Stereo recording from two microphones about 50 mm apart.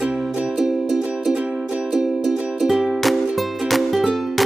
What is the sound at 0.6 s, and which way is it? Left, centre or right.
Music, centre.